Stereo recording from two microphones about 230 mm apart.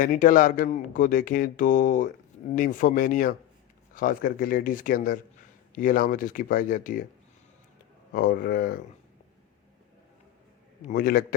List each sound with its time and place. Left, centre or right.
0.0 s speech: left
8.1 s speech: left
10.8 s speech: left